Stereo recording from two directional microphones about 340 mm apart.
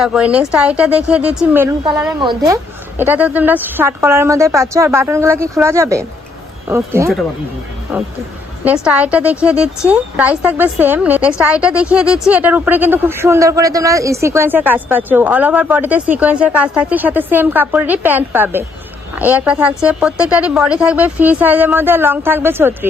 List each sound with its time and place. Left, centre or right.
0.0 s a woman's voice: centre
8.6 s a woman's voice: centre